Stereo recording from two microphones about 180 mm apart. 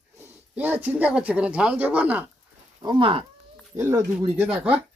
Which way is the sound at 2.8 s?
25° right (ahead or behind).